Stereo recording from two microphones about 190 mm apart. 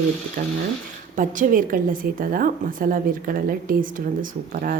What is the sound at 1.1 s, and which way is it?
A woman's voice, 45° right (ahead or behind).